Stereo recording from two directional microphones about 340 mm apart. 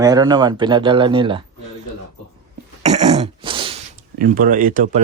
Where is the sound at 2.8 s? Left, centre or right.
Centre.